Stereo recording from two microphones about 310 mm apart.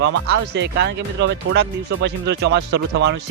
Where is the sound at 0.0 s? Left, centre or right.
Right.